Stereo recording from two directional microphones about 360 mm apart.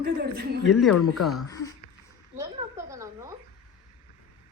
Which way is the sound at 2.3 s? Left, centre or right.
Centre.